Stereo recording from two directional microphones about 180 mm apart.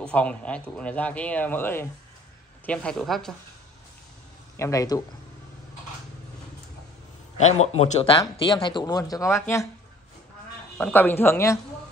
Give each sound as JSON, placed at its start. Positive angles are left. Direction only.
{"t": 0.0, "sound": "speech", "side_deg": 5}
{"t": 4.6, "sound": "speech", "side_deg": 15}
{"t": 7.3, "sound": "a man's voice", "side_deg": 35}
{"t": 10.8, "sound": "speech", "side_deg": 10}